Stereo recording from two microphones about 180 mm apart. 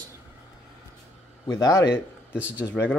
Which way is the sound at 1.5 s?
20° left (ahead or behind).